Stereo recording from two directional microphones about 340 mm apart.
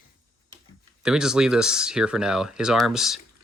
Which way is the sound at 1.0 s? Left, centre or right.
Centre.